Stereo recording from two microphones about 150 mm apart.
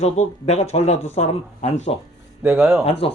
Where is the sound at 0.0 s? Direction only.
50° left (ahead or behind).